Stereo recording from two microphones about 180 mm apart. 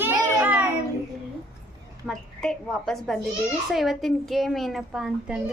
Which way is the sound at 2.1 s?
5° left (ahead or behind).